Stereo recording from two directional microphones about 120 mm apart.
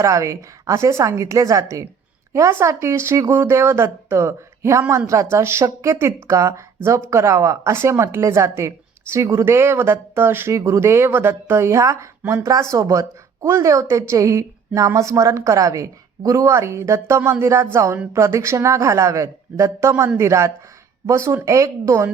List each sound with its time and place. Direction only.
0.0 s speech: 25° right (ahead or behind)